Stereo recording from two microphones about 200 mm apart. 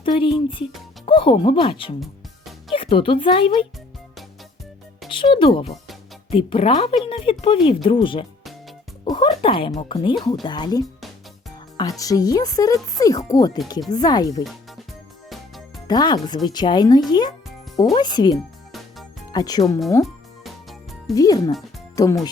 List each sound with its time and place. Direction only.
0.0 s speech: 25° left (ahead or behind)
2.7 s speech: 25° left (ahead or behind)
5.0 s music: 25° left (ahead or behind)
6.3 s speech: 30° left (ahead or behind)
15.9 s speech: 20° left (ahead or behind)
20.4 s music: centre (ahead or behind)
21.2 s speech: 20° left (ahead or behind)